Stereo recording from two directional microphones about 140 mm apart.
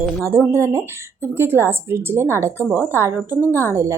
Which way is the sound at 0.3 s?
20° right (ahead or behind).